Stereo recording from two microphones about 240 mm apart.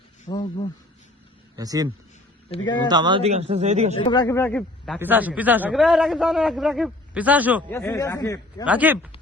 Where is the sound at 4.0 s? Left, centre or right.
Centre.